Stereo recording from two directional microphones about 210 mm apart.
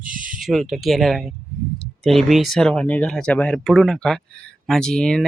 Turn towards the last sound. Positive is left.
turn(degrees=5)  # may be behind; listen again after turning